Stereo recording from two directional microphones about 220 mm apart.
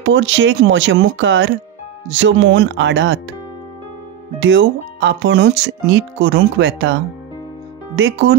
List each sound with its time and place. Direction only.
0.0 s speech: 60° right (ahead or behind)
4.4 s speech: 55° right (ahead or behind)
8.0 s speech: 55° right (ahead or behind)